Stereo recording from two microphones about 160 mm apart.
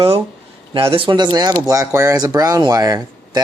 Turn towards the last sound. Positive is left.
turn(degrees=-25)  # may be behind; listen again after turning